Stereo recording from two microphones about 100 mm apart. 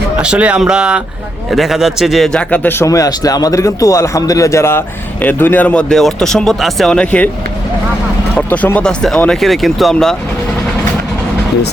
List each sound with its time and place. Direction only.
0.2 s speech: 10° right (ahead or behind)
2.5 s speech: 20° left (ahead or behind)
2.8 s speech: 35° left (ahead or behind); by 7.3 s 10° left (ahead or behind)
8.4 s speech: 15° left (ahead or behind)